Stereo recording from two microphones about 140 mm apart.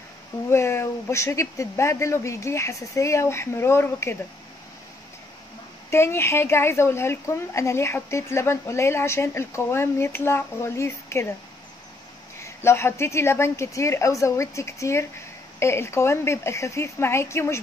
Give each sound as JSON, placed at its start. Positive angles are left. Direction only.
{"t": 0.5, "sound": "speech", "side_deg": 20}
{"t": 5.9, "sound": "speech", "side_deg": 20}
{"t": 12.4, "sound": "speech", "side_deg": 20}